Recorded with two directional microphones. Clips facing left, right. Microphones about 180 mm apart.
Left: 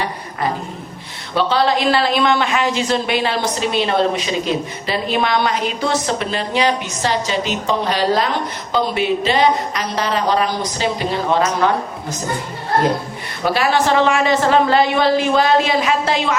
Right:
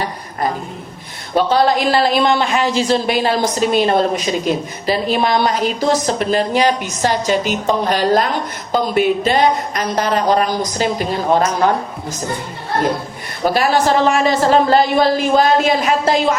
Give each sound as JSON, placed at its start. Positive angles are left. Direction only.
{"t": 1.4, "sound": "speech", "side_deg": -45}
{"t": 13.4, "sound": "speech", "side_deg": -40}